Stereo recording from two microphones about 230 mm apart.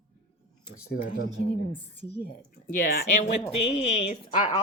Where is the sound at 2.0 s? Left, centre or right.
Left.